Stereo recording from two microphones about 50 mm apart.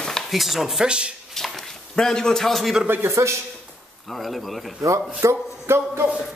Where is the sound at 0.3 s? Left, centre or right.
Centre.